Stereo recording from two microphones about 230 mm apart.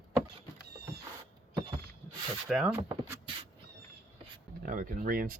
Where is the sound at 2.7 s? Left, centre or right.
Centre.